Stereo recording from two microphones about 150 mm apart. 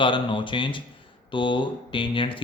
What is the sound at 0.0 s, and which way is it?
Speech, 35° left (ahead or behind).